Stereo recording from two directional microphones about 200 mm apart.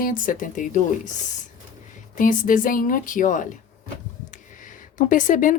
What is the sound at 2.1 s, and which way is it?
Speech, 40° left (ahead or behind).